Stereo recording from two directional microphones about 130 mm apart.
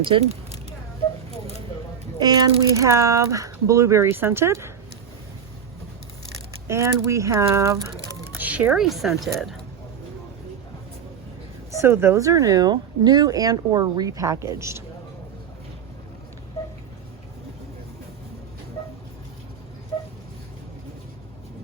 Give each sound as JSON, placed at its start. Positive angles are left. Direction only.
{"t": 0.0, "sound": "speech", "side_deg": -45}
{"t": 2.1, "sound": "speech", "side_deg": -30}
{"t": 6.7, "sound": "speech", "side_deg": -20}
{"t": 8.4, "sound": "speech", "side_deg": -10}
{"t": 11.8, "sound": "speech", "side_deg": -20}